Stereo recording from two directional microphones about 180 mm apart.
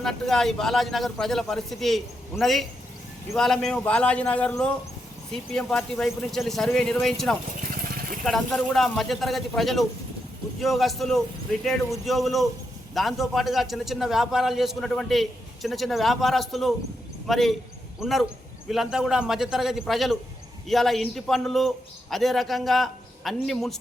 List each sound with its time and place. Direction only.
0.0 s a man's voice: 5° left (ahead or behind)
7.6 s vehicle: 50° right (ahead or behind)
8.2 s a man's voice: centre (ahead or behind)